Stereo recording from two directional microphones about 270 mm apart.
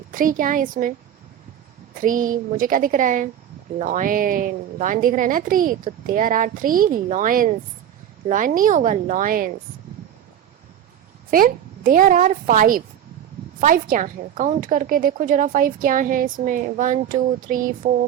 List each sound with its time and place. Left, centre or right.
0.1 s a woman's voice: right
2.0 s a woman's voice: right
11.3 s a woman's voice: right